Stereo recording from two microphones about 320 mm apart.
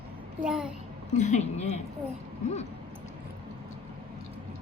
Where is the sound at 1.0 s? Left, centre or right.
Left.